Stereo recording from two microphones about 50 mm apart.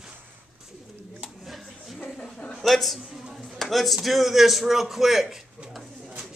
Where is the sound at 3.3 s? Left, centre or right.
Centre.